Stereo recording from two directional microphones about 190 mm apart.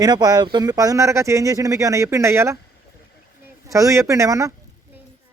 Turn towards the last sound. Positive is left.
turn(degrees=-15)  # may be behind; listen again after turning